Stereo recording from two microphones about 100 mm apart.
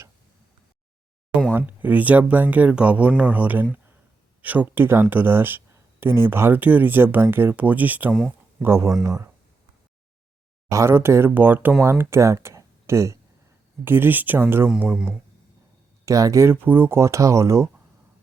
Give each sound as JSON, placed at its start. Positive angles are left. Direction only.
{"t": 1.5, "sound": "speech", "side_deg": -15}
{"t": 10.7, "sound": "speech", "side_deg": -30}
{"t": 16.0, "sound": "speech", "side_deg": -35}